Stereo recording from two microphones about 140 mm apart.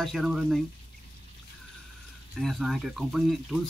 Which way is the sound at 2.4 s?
Centre (ahead or behind).